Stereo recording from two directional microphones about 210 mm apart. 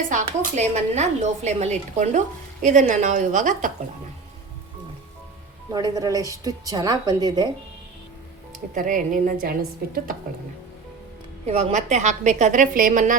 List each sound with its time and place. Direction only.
0.1 s speech: 35° right (ahead or behind)
5.7 s a woman's voice: 20° right (ahead or behind)
8.7 s speech: 40° right (ahead or behind)
11.4 s speech: 30° right (ahead or behind)